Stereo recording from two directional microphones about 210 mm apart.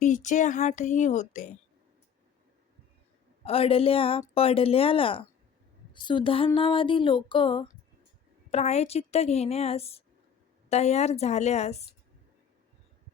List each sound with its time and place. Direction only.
0.0 s speech: 35° left (ahead or behind)
3.4 s speech: 25° left (ahead or behind)